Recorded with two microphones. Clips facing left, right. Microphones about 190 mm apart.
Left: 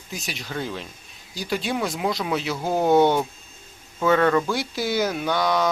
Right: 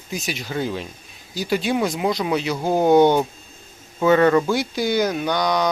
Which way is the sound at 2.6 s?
20° right (ahead or behind).